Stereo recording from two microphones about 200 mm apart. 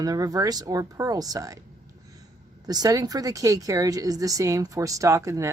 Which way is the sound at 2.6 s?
20° right (ahead or behind).